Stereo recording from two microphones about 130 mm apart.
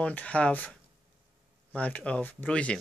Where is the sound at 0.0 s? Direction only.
10° left (ahead or behind).